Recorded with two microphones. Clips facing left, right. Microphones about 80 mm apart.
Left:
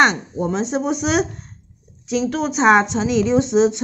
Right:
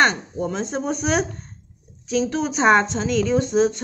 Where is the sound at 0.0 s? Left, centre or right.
Left.